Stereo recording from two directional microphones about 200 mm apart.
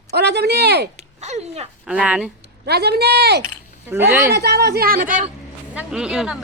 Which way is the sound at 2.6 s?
55° right (ahead or behind).